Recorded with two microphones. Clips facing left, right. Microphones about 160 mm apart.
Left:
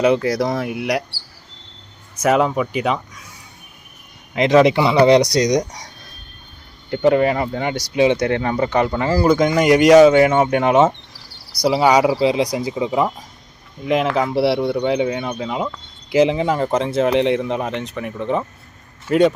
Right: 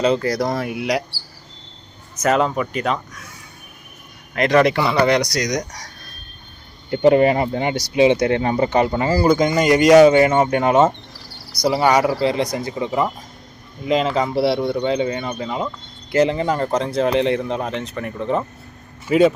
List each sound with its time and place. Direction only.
0.0 s speech: 5° left (ahead or behind)
2.2 s speech: 10° left (ahead or behind)
4.4 s speech: 20° left (ahead or behind)
7.1 s speech: 30° right (ahead or behind)
7.4 s speech: 15° right (ahead or behind)
8.4 s speech: 25° right (ahead or behind)
9.0 s speech: 5° right (ahead or behind)
9.9 s speech: 5° right (ahead or behind)